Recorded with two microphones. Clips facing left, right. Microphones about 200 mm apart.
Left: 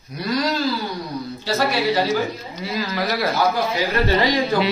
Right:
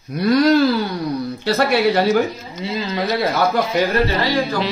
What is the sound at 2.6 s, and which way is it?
Speech, 25° right (ahead or behind).